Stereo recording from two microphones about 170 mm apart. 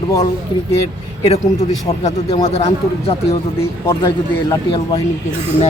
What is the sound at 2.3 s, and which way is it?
Speech, 35° left (ahead or behind).